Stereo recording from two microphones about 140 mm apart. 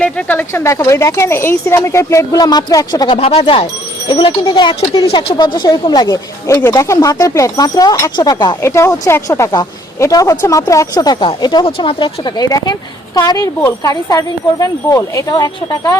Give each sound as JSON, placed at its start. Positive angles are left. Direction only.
{"t": 0.0, "sound": "speech", "side_deg": 10}
{"t": 3.2, "sound": "speech", "side_deg": 45}
{"t": 8.6, "sound": "speech", "side_deg": 20}